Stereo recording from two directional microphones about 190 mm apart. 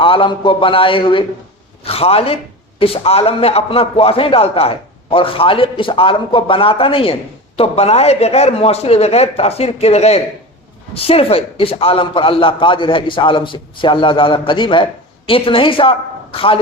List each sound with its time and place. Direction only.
0.0 s a man's voice: 25° left (ahead or behind)